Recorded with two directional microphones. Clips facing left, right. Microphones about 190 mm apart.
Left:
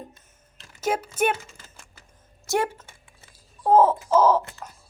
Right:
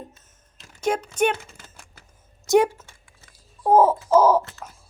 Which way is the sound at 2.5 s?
15° right (ahead or behind).